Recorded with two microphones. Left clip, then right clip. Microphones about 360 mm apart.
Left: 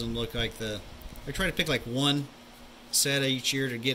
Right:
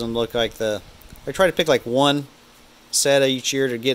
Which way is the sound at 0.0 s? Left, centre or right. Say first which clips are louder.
Right 10 dB; centre.